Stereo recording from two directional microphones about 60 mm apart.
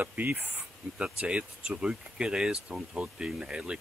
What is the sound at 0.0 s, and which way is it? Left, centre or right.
Speech, right.